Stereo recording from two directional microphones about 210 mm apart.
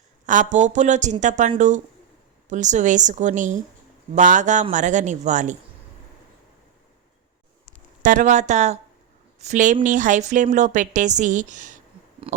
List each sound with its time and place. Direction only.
0.3 s a woman's voice: 35° right (ahead or behind)
7.7 s a woman's voice: 40° right (ahead or behind)